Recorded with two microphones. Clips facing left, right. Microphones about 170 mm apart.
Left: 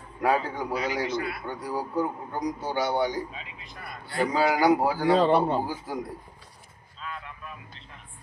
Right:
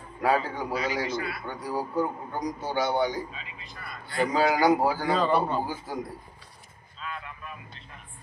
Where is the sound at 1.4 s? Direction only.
15° left (ahead or behind).